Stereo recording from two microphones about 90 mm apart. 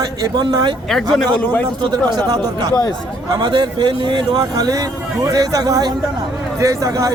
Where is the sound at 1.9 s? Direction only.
50° right (ahead or behind).